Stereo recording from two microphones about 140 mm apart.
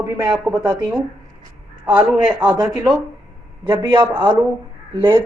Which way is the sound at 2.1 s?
15° right (ahead or behind).